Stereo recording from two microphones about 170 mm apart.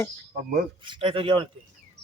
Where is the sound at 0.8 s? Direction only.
30° right (ahead or behind).